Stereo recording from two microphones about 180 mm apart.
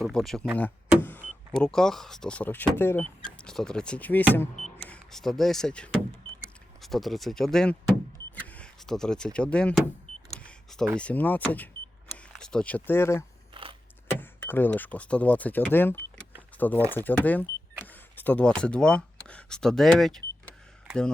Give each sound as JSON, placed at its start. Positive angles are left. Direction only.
{"t": 0.0, "sound": "speech", "side_deg": 0}
{"t": 0.6, "sound": "vehicle", "side_deg": 10}
{"t": 1.5, "sound": "speech", "side_deg": 5}
{"t": 4.4, "sound": "vehicle", "side_deg": 0}
{"t": 4.9, "sound": "speech", "side_deg": 0}
{"t": 10.3, "sound": "vehicle", "side_deg": 5}
{"t": 11.0, "sound": "speech", "side_deg": 10}
{"t": 13.5, "sound": "keys jangling", "side_deg": -30}
{"t": 14.2, "sound": "speech", "side_deg": 10}
{"t": 17.8, "sound": "a sound", "side_deg": 10}